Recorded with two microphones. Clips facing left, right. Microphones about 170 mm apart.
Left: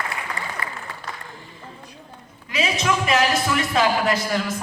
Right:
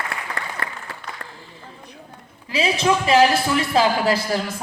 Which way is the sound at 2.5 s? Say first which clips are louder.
Right 3 dB; 30° right (ahead or behind).